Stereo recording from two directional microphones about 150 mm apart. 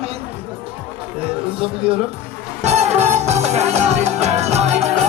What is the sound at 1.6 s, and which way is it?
Speech, 40° right (ahead or behind).